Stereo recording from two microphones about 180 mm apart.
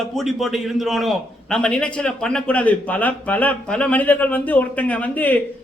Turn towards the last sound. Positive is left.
turn(degrees=10)  # may be behind; listen again after turning